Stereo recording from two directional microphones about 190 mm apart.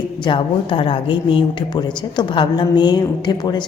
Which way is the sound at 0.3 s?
25° left (ahead or behind).